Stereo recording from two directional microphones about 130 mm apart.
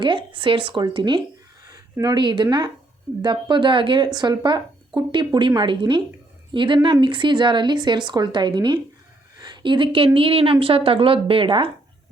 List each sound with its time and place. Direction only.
0.0 s a woman's voice: 40° right (ahead or behind)